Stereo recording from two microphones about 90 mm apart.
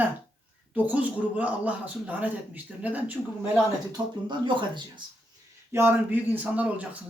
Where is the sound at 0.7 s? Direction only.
15° right (ahead or behind).